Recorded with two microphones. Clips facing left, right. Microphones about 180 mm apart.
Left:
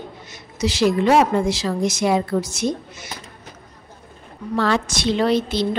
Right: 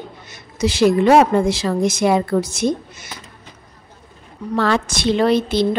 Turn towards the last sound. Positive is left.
turn(degrees=-55)  # may be behind; listen again after turning